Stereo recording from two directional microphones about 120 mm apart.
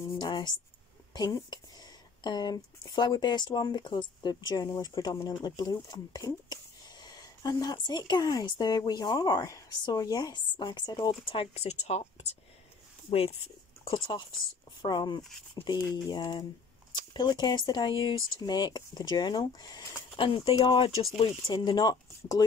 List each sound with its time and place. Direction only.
0.2 s speech: 35° left (ahead or behind); by 12.4 s 65° left (ahead or behind)
13.8 s speech: 45° left (ahead or behind)
20.2 s speech: 45° left (ahead or behind)